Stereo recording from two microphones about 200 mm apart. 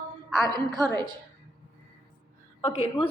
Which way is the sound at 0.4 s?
20° right (ahead or behind).